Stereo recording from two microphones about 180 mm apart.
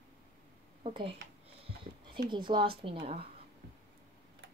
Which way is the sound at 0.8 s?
30° right (ahead or behind).